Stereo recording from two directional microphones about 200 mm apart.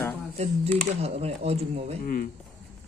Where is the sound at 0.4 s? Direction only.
30° right (ahead or behind).